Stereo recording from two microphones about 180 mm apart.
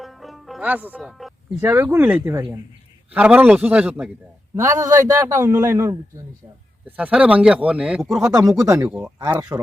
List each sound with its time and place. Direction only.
0.0 s music: centre (ahead or behind)
1.7 s a man's voice: 15° right (ahead or behind)
8.4 s a man's voice: 20° right (ahead or behind)
8.9 s a man's voice: 5° right (ahead or behind)